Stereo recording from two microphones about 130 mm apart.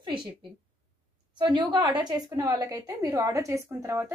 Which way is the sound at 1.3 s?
35° right (ahead or behind).